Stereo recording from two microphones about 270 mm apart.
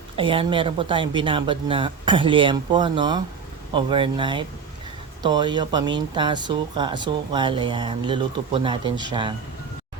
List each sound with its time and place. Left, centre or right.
0.2 s speech: centre